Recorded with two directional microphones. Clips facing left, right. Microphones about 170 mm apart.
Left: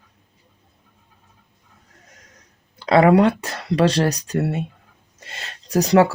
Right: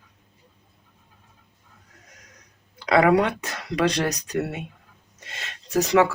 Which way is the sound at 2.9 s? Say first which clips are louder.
Left 4 dB; 25° left (ahead or behind).